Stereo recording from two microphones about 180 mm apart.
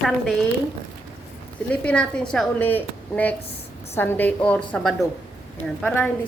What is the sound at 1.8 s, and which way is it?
A woman's voice, 5° left (ahead or behind).